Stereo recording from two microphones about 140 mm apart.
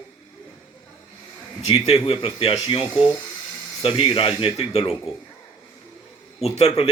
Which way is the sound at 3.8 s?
40° left (ahead or behind).